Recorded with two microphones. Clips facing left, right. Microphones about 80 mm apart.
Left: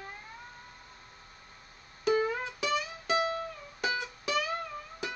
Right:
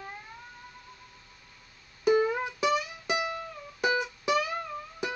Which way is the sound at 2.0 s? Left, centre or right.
Centre.